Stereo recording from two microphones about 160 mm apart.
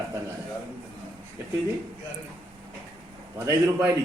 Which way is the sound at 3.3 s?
15° right (ahead or behind).